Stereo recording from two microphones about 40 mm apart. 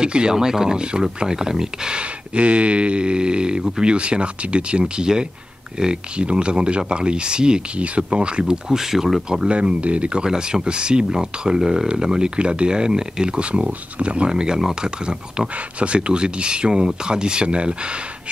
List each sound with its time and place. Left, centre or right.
0.0 s speech: right
2.0 s speech: right; by 9.5 s centre
9.5 s speech: right
10.2 s speech: centre